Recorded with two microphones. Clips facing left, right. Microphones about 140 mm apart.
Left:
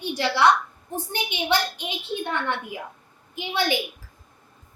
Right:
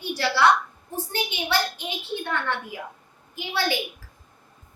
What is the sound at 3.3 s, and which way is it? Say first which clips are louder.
Speech: left 2 dB; 15° left (ahead or behind).